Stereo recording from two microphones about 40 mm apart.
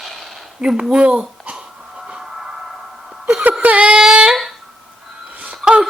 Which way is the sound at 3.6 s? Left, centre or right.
Right.